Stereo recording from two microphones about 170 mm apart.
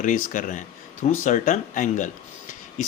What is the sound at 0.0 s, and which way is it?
Speech, 50° left (ahead or behind).